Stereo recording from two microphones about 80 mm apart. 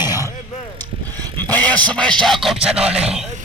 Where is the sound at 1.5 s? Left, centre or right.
Left.